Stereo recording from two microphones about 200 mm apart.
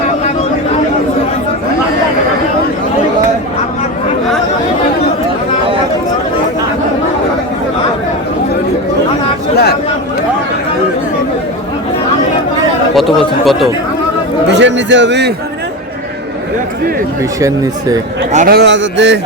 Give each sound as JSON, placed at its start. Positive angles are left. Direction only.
{"t": 13.0, "sound": "chatter", "side_deg": 0}
{"t": 14.5, "sound": "a sound", "side_deg": -65}
{"t": 17.4, "sound": "speech", "side_deg": -20}
{"t": 18.3, "sound": "a man's voice", "side_deg": -35}
{"t": 18.5, "sound": "speech", "side_deg": -60}